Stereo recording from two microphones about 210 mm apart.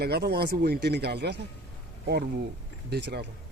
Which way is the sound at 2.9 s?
50° right (ahead or behind).